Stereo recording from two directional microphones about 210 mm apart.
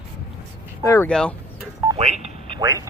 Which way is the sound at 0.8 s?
15° left (ahead or behind).